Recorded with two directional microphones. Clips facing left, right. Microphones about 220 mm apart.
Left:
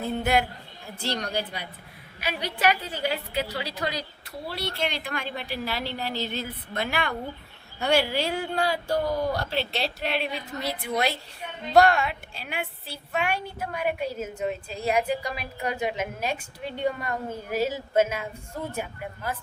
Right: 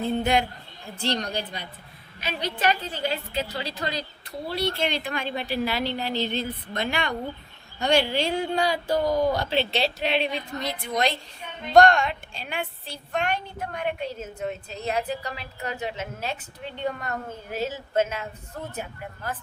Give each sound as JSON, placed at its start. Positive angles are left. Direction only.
{"t": 0.0, "sound": "a woman's voice", "side_deg": 5}
{"t": 5.2, "sound": "speech", "side_deg": -30}
{"t": 5.6, "sound": "a woman's voice", "side_deg": 0}